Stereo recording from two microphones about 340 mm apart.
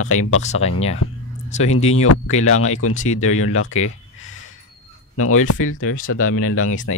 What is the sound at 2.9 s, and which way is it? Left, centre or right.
Speech, left.